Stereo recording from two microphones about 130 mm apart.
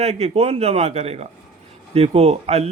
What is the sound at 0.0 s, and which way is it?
Speech, 50° right (ahead or behind).